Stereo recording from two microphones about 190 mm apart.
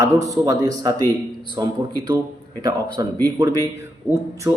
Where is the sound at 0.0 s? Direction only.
15° right (ahead or behind).